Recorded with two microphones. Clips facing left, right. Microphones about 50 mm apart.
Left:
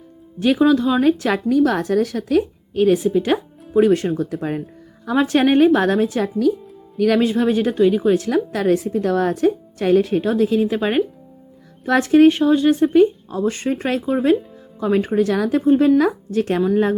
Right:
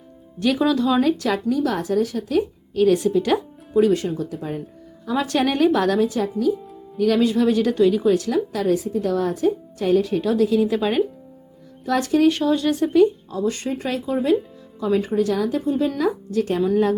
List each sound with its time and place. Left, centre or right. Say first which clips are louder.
0.3 s speech: left 4 dB; left
1.0 s speech: left 4 dB; left
1.3 s a woman's voice: left 4 dB; left
2.7 s speech: left 1 dB; left
3.8 s speech: left 3 dB; left
5.1 s speech: left 5 dB; left
7.2 s speech: left 1 dB; left
8.3 s a woman's voice: left 3 dB; left
10.2 s speech: left 1 dB; left
12.3 s speech: left 5 dB; centre
13.3 s a woman's voice: left 3 dB; left